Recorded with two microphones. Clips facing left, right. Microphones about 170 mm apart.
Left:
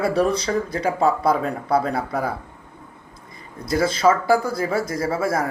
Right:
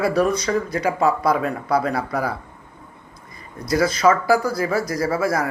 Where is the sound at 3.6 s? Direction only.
25° left (ahead or behind).